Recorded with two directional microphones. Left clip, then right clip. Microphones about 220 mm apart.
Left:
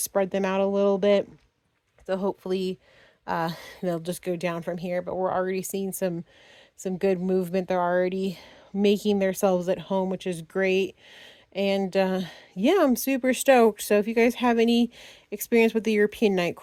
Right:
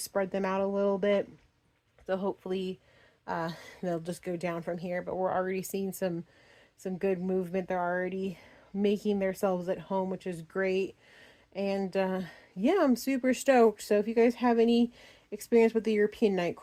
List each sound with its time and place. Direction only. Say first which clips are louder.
0.0 s speech: left 6 dB; 40° left (ahead or behind)